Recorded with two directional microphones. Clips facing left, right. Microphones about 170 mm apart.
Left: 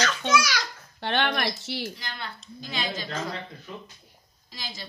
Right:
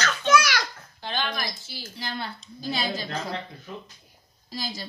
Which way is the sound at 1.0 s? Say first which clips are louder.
Left 5 dB; 65° left (ahead or behind).